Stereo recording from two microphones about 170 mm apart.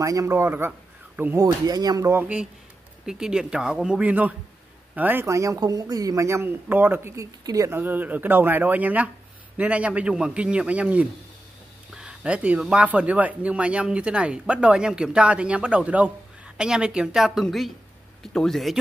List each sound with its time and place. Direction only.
0.0 s speech: 20° right (ahead or behind); by 18.8 s centre (ahead or behind)